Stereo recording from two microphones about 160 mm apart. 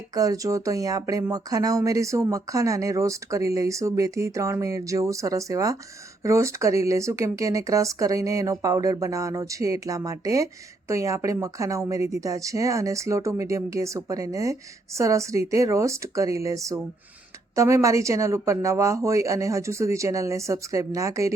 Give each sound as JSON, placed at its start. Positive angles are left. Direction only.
{"t": 0.1, "sound": "speech", "side_deg": -20}